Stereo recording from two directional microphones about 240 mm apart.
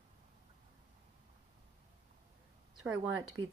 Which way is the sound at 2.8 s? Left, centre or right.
Right.